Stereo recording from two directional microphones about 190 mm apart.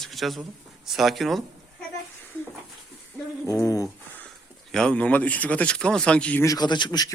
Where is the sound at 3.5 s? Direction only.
20° left (ahead or behind).